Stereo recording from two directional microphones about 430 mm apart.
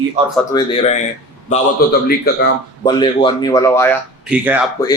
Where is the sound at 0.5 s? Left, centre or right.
Centre.